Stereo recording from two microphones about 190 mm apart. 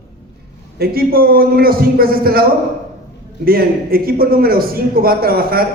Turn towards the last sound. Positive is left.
turn(degrees=-50)  # may be behind; listen again after turning